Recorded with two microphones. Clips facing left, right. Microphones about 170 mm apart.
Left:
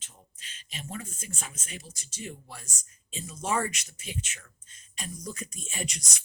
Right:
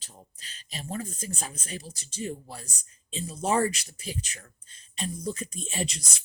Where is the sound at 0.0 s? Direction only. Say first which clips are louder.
Right 4 dB; 35° right (ahead or behind).